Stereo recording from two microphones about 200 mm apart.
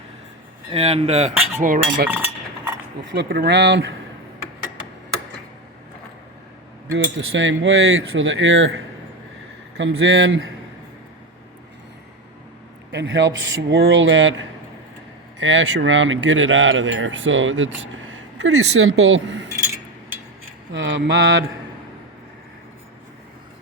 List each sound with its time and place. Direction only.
0.7 s cutlery: 30° right (ahead or behind)
2.0 s cutlery: 10° right (ahead or behind)
3.0 s speech: 60° right (ahead or behind)
6.9 s speech: 70° right (ahead or behind)
12.9 s speech: 65° right (ahead or behind)
20.7 s speech: 70° right (ahead or behind)